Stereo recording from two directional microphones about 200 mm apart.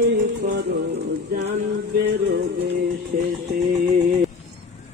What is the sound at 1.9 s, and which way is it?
Music, 50° right (ahead or behind).